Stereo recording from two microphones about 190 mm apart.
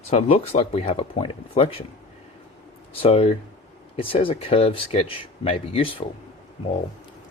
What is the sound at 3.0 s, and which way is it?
Speech, 30° left (ahead or behind).